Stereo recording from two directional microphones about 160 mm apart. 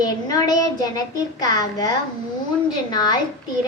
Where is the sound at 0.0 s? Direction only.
25° left (ahead or behind).